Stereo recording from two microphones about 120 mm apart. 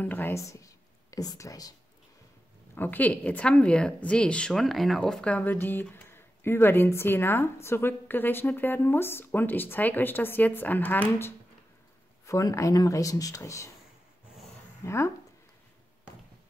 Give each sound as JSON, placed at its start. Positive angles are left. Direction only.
{"t": 0.0, "sound": "speech", "side_deg": 15}
{"t": 2.7, "sound": "a woman's voice", "side_deg": 15}
{"t": 14.8, "sound": "speech", "side_deg": 25}